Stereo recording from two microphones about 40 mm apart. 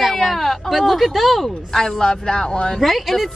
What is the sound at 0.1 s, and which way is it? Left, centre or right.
Speech, centre.